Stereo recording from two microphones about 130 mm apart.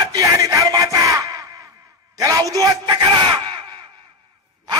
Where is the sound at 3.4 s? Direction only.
40° right (ahead or behind).